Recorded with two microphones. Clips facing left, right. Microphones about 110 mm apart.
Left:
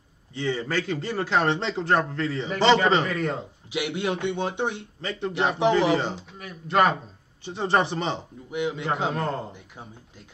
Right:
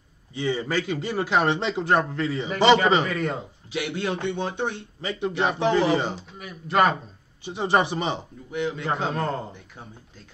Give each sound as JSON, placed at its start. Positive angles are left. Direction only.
{"t": 0.3, "sound": "a man's voice", "side_deg": -10}
{"t": 3.7, "sound": "a man's voice", "side_deg": 25}
{"t": 5.0, "sound": "a man's voice", "side_deg": -15}
{"t": 6.3, "sound": "a man's voice", "side_deg": -5}
{"t": 8.5, "sound": "a man's voice", "side_deg": 15}
{"t": 9.1, "sound": "a man's voice", "side_deg": 0}